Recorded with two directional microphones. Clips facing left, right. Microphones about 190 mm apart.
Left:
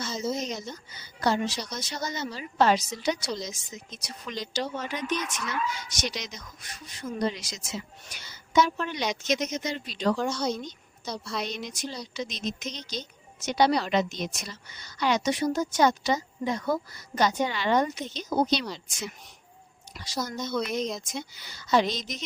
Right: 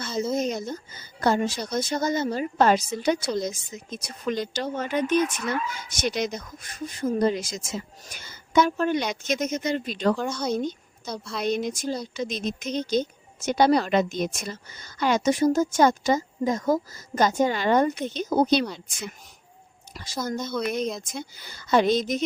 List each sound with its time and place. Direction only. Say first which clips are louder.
0.3 s a woman's voice: right 7 dB; 55° right (ahead or behind)
11.1 s a woman's voice: right 1 dB; centre (ahead or behind)
11.4 s a woman's voice: right 9 dB; 50° right (ahead or behind)
20.2 s a woman's voice: right 4 dB; 50° right (ahead or behind)